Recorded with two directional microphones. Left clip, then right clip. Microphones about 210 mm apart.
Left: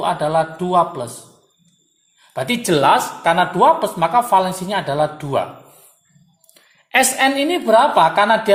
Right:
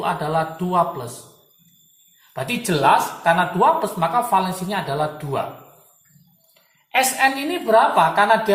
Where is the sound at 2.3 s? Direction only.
45° left (ahead or behind).